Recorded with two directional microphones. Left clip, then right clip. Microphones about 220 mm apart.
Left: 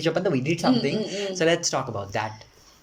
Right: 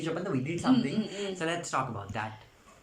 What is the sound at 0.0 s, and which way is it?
Speech, 45° left (ahead or behind).